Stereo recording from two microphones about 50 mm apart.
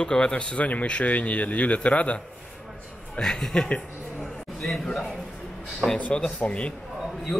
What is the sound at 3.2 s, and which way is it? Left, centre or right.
Speech, centre.